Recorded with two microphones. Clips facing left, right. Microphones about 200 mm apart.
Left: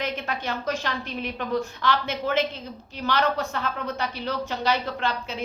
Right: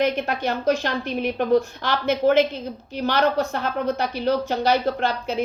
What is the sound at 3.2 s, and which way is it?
Speech, 45° right (ahead or behind).